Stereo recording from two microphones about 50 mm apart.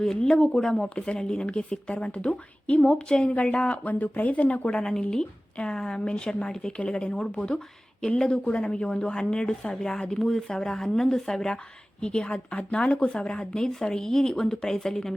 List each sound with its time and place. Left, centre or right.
0.0 s a woman's voice: centre